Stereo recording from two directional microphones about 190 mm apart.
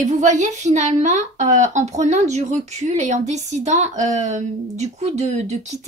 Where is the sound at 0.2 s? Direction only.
40° right (ahead or behind).